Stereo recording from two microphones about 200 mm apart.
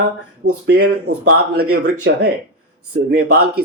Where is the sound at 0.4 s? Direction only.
75° right (ahead or behind).